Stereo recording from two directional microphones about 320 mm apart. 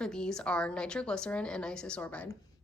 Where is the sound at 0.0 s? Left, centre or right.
Centre.